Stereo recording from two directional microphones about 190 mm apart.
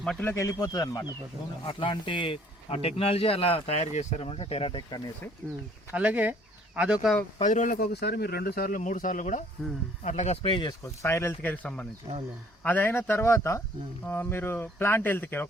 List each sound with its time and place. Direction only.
0.0 s speech: 5° left (ahead or behind); by 4.9 s 25° left (ahead or behind)
5.9 s speech: 5° right (ahead or behind)
7.3 s speech: 40° left (ahead or behind); by 15.4 s 10° left (ahead or behind)